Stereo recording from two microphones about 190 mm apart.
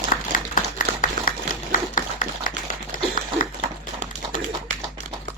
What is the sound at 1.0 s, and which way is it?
Typewriter, 45° left (ahead or behind).